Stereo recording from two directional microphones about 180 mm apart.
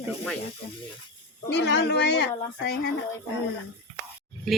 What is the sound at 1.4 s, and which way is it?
Speech, 75° left (ahead or behind).